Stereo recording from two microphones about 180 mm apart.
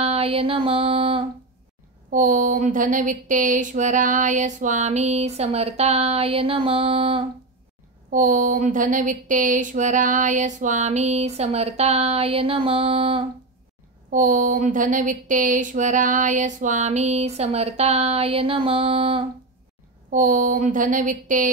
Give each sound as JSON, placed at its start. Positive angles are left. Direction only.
{"t": 0.0, "sound": "speech", "side_deg": -35}
{"t": 2.0, "sound": "speech", "side_deg": -45}
{"t": 8.1, "sound": "a woman's voice", "side_deg": -45}
{"t": 14.1, "sound": "speech", "side_deg": -45}
{"t": 20.1, "sound": "a woman's voice", "side_deg": -45}